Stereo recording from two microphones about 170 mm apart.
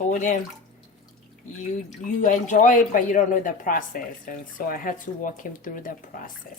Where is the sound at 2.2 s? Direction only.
50° left (ahead or behind).